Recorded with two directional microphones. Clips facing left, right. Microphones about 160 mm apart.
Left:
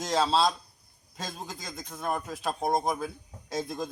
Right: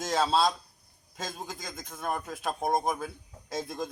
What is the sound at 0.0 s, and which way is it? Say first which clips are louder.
Speech: left 1 dB; 5° right (ahead or behind).